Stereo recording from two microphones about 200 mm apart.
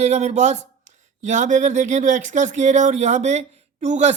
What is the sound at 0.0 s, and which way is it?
Speech, 35° right (ahead or behind).